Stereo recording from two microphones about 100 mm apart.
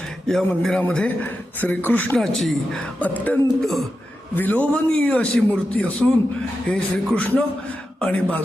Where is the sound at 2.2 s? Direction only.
5° left (ahead or behind).